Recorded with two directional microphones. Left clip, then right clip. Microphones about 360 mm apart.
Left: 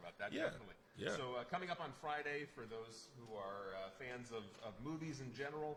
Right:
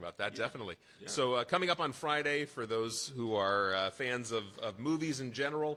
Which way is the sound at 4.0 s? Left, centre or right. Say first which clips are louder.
Right 14 dB; right.